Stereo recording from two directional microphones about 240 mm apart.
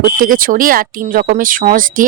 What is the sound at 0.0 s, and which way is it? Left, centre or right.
Speech, right.